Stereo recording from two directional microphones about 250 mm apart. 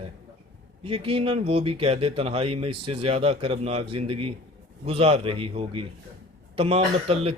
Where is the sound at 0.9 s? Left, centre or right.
Right.